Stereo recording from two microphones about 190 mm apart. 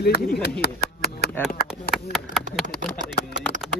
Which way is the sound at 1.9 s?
Centre (ahead or behind).